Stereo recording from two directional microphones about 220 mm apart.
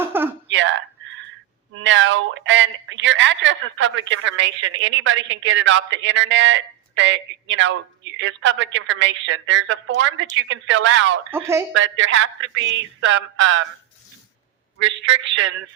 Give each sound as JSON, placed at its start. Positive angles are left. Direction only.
{"t": 0.0, "sound": "a sound", "side_deg": -10}
{"t": 0.4, "sound": "a sound", "side_deg": -60}
{"t": 1.7, "sound": "a woman's voice", "side_deg": -60}
{"t": 11.3, "sound": "speech", "side_deg": -10}
{"t": 11.7, "sound": "a woman's voice", "side_deg": -60}
{"t": 14.8, "sound": "a woman's voice", "side_deg": -55}